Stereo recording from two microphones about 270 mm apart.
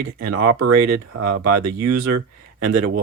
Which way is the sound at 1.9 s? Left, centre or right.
Right.